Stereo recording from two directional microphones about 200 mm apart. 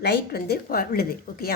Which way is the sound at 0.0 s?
55° left (ahead or behind).